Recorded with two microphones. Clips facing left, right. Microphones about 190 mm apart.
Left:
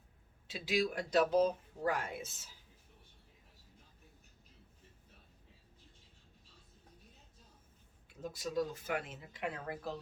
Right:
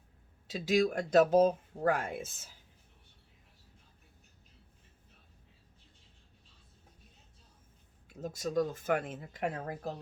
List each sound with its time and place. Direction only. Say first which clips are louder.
0.4 s speech: right 6 dB; 45° right (ahead or behind)
8.2 s speech: right 5 dB; 45° right (ahead or behind)